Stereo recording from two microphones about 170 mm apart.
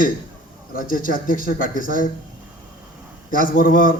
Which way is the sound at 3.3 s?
55° left (ahead or behind).